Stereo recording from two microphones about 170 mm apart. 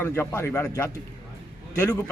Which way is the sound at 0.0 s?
15° left (ahead or behind).